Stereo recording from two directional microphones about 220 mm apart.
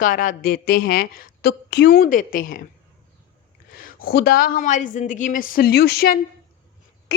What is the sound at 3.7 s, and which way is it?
Speech, 40° left (ahead or behind).